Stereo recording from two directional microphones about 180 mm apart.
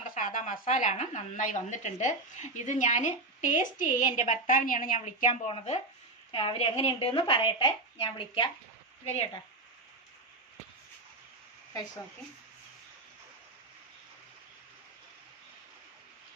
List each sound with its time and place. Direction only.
0.1 s speech: 45° left (ahead or behind)
5.3 s speech: 30° left (ahead or behind)